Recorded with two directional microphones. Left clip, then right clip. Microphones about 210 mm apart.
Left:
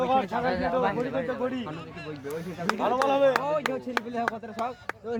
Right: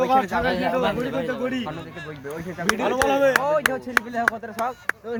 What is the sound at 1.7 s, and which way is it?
Speech, 20° left (ahead or behind).